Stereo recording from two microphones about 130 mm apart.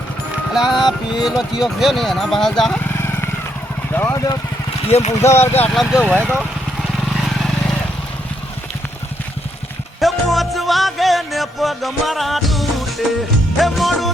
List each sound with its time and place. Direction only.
0.5 s speech: 5° right (ahead or behind)
3.9 s speech: 20° left (ahead or behind)
4.9 s speech: 50° left (ahead or behind)
5.2 s speech: 20° left (ahead or behind)
5.7 s speech: centre (ahead or behind)
7.3 s vehicle: centre (ahead or behind)
10.0 s music: centre (ahead or behind)